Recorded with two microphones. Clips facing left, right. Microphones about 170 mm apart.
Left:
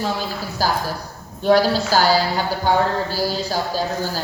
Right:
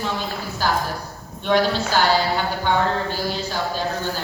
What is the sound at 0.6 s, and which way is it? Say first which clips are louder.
A woman's voice: left 1 dB; 35° left (ahead or behind).